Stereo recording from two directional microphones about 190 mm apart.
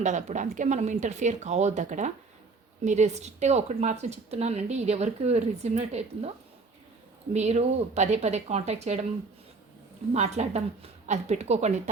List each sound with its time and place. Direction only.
0.0 s speech: 40° right (ahead or behind)
7.3 s speech: 35° right (ahead or behind)
10.1 s speech: 35° right (ahead or behind)